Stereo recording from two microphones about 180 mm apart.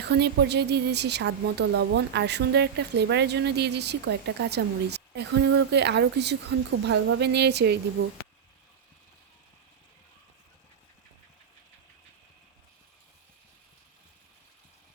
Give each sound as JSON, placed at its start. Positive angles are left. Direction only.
{"t": 0.0, "sound": "speech", "side_deg": -70}